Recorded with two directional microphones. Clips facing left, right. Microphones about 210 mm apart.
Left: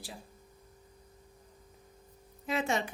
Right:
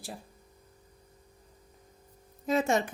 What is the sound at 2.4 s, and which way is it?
Speech, 40° right (ahead or behind).